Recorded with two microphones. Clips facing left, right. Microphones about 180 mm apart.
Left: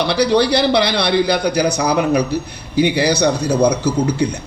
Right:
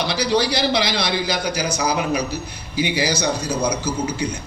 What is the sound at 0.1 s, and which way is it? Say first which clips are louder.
A man's voice: left 7 dB; 60° left (ahead or behind).